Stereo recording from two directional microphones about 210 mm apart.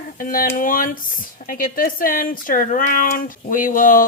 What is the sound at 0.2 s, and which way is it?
Speech, 40° left (ahead or behind).